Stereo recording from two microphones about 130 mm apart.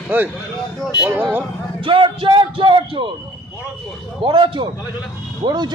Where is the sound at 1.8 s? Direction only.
40° right (ahead or behind).